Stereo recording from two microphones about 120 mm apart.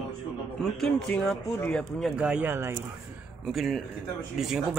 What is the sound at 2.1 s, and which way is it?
Speech, 10° right (ahead or behind).